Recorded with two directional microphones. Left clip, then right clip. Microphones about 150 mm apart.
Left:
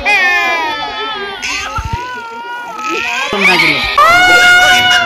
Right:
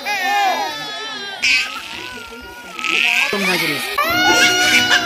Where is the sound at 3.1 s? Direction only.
10° right (ahead or behind).